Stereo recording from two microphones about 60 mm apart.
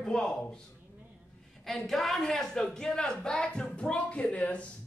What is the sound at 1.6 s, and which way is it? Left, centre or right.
A woman's voice, centre.